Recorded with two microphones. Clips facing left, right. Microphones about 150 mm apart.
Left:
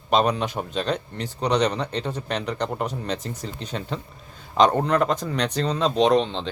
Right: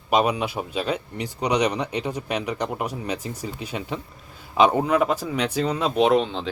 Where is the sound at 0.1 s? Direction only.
10° right (ahead or behind).